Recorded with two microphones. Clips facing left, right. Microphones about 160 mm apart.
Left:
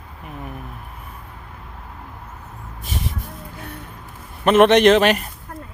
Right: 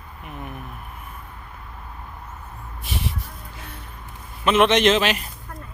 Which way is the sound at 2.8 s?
45° left (ahead or behind).